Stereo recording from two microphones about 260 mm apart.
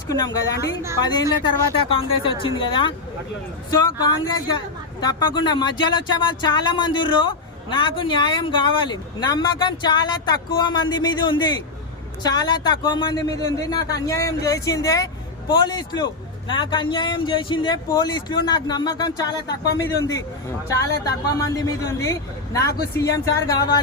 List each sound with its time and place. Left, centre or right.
0.1 s speech: centre
1.8 s speech: centre